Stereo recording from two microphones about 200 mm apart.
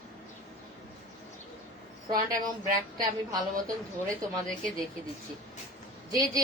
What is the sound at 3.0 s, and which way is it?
Speech, 20° right (ahead or behind).